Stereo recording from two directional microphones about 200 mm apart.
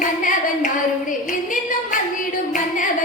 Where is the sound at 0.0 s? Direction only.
40° left (ahead or behind).